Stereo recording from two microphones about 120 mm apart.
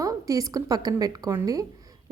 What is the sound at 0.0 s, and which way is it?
A woman's voice, 30° right (ahead or behind).